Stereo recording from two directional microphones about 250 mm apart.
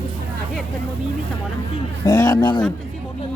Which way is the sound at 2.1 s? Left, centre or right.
Centre.